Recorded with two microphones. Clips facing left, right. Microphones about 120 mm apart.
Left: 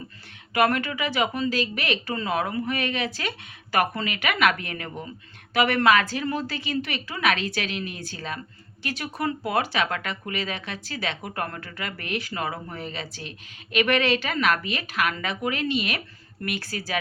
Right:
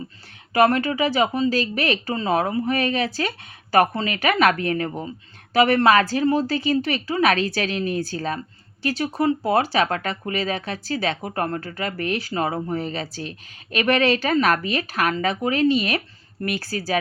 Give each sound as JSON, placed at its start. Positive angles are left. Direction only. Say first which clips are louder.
{"t": 0.5, "sound": "speech", "louder": "right 5 dB", "side_deg": -35}